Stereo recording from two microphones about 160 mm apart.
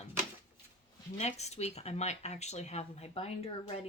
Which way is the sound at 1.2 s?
45° left (ahead or behind).